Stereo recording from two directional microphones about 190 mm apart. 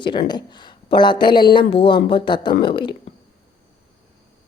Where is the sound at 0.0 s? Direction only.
25° left (ahead or behind).